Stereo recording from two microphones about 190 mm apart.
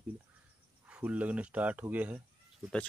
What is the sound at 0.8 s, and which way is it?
Speech, 5° right (ahead or behind).